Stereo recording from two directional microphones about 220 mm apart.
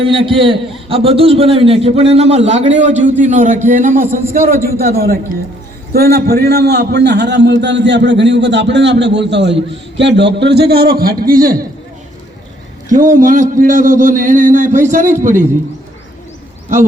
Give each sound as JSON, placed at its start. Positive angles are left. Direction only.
{"t": 0.0, "sound": "a man's voice", "side_deg": -25}
{"t": 12.9, "sound": "a man's voice", "side_deg": -35}